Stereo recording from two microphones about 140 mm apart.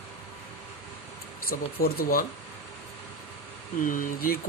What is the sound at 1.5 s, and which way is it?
Speech, 90° left.